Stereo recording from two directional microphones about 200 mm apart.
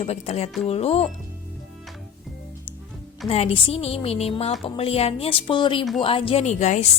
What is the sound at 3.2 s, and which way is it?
A woman's voice, 30° left (ahead or behind).